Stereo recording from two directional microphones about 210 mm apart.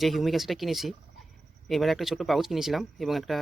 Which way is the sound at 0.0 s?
Centre (ahead or behind).